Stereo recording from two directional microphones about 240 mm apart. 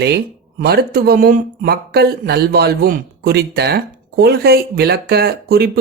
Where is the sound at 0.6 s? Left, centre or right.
Right.